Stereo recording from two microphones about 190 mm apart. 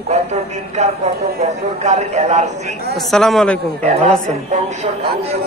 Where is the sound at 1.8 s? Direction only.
35° right (ahead or behind).